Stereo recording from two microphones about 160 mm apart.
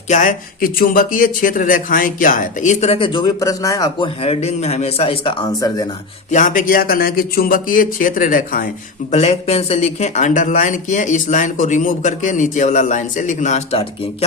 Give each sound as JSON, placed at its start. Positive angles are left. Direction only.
{"t": 0.1, "sound": "speech", "side_deg": 55}
{"t": 4.2, "sound": "speech", "side_deg": 40}
{"t": 6.3, "sound": "speech", "side_deg": 55}
{"t": 9.1, "sound": "speech", "side_deg": 40}